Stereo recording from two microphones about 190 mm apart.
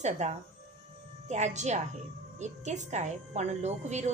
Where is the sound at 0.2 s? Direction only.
40° right (ahead or behind).